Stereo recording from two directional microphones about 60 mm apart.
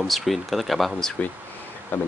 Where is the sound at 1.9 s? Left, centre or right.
Left.